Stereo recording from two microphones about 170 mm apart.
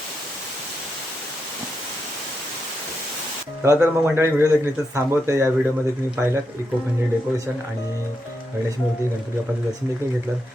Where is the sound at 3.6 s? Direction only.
15° right (ahead or behind).